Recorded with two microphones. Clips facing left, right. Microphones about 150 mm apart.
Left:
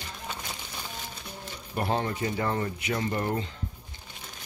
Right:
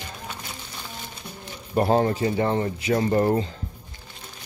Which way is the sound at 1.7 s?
35° right (ahead or behind).